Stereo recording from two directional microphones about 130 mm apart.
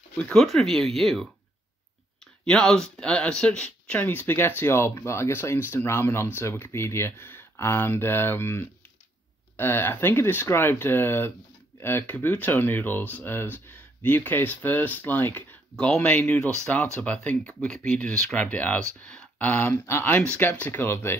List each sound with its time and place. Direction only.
0.2 s speech: 5° left (ahead or behind)
2.4 s speech: 5° left (ahead or behind)
15.7 s speech: 5° left (ahead or behind)